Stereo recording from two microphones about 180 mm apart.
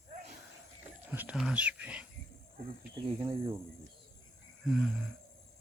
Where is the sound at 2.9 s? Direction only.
30° right (ahead or behind).